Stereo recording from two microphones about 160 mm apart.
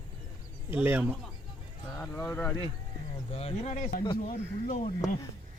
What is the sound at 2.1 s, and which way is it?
Speech, 15° left (ahead or behind).